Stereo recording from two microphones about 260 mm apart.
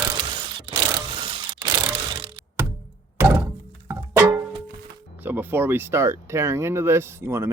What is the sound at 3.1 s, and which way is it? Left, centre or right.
Music, centre.